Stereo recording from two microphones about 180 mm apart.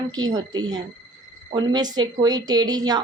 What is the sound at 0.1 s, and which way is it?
Speech, 20° right (ahead or behind).